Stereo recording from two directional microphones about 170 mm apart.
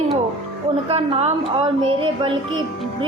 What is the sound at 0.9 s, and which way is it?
A woman's voice, 35° right (ahead or behind).